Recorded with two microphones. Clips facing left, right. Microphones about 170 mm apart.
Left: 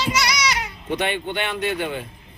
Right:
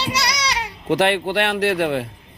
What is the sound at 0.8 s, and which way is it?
A man's voice, 90° right.